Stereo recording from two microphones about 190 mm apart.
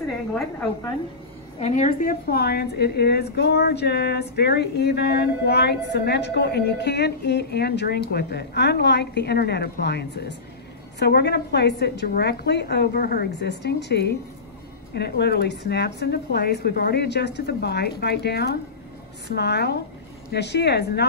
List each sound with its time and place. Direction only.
1.6 s a woman's voice: 40° left (ahead or behind); by 21.1 s 60° left (ahead or behind)